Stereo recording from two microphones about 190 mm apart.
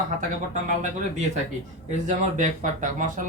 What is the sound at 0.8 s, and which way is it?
Speech, 40° right (ahead or behind).